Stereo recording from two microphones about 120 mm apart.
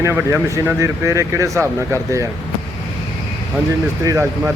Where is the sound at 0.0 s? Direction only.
20° right (ahead or behind).